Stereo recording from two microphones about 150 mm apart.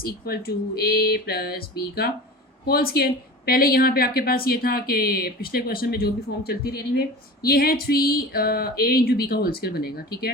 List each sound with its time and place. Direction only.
0.0 s speech: 90° left